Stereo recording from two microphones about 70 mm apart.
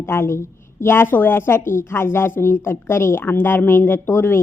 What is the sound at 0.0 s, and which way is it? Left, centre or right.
A woman's voice, left.